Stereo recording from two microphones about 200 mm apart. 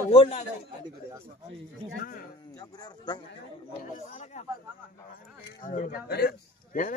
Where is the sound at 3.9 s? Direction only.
40° left (ahead or behind).